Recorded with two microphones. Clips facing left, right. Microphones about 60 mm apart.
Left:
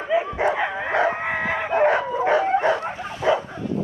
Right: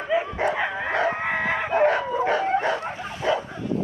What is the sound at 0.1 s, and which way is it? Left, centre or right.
Bow-wow, centre.